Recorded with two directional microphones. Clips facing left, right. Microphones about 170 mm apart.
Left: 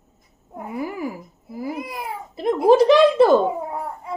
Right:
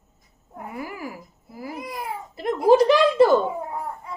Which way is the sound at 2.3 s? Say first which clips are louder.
Left 2 dB; 25° left (ahead or behind).